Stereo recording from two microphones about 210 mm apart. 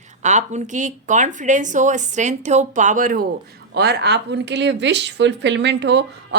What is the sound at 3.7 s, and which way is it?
Speech, 50° right (ahead or behind).